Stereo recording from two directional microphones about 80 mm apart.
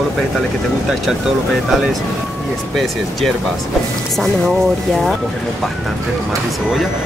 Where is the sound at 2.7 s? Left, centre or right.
Centre.